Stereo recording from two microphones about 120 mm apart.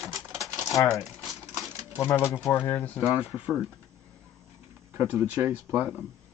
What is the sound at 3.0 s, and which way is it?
Speech, 5° right (ahead or behind).